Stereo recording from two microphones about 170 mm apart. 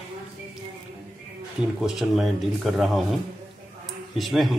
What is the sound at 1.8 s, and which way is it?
A man's voice, centre (ahead or behind).